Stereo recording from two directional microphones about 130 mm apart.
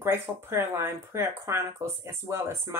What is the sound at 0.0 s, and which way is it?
Speech, 20° right (ahead or behind).